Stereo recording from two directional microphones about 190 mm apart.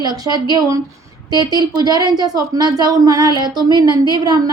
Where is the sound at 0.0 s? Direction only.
20° right (ahead or behind).